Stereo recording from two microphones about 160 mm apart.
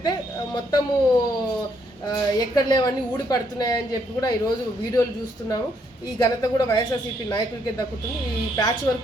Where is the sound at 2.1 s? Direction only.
25° left (ahead or behind).